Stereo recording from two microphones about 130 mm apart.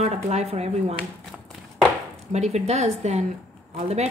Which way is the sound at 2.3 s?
60° right (ahead or behind).